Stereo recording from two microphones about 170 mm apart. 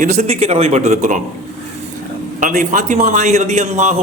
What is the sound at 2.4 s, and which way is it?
A man's voice, 50° right (ahead or behind).